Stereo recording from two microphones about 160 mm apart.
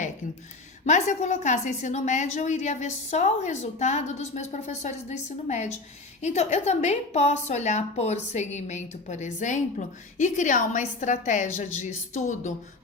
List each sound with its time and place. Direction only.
0.9 s a woman's voice: 45° left (ahead or behind)